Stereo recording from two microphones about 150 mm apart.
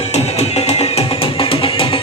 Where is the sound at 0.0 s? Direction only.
45° left (ahead or behind).